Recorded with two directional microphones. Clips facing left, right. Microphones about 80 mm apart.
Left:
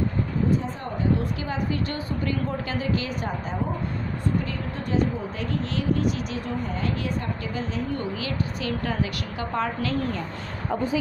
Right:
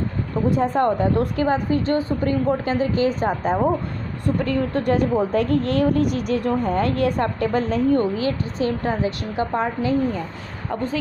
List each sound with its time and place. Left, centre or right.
0.5 s a woman's voice: right
4.5 s a woman's voice: right; by 10.2 s centre
10.7 s speech: centre